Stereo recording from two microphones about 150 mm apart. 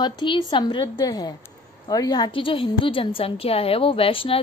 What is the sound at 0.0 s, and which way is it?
A woman's voice, 30° left (ahead or behind).